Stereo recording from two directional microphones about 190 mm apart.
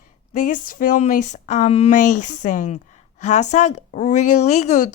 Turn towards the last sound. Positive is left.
turn(degrees=40)  # may be behind; listen again after turning